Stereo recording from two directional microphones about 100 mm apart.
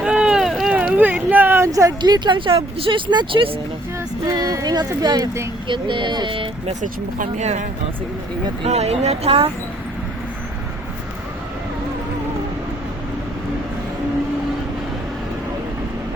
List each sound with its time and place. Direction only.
0.0 s boat: 5° right (ahead or behind)
0.8 s a sound: 15° right (ahead or behind); by 1.9 s 30° right (ahead or behind)
2.0 s speech: 50° right (ahead or behind); by 3.0 s 65° right (ahead or behind)
3.1 s speech: 55° right (ahead or behind)
4.3 s speech: 40° right (ahead or behind)
5.6 s speech: 55° right (ahead or behind)
8.7 s speech: 90° right